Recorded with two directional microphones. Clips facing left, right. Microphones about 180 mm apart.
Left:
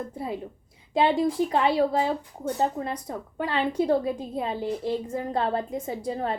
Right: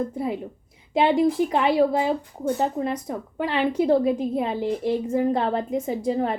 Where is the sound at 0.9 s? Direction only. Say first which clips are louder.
Right 3 dB; 15° right (ahead or behind).